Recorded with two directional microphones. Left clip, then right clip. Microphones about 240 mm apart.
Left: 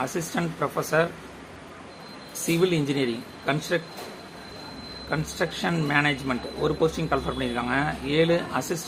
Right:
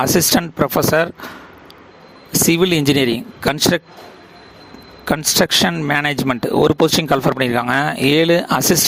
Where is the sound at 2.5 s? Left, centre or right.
Right.